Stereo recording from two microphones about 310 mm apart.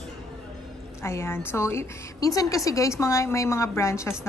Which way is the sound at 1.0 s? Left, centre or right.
Centre.